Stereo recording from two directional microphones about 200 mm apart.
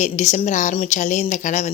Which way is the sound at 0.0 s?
35° left (ahead or behind).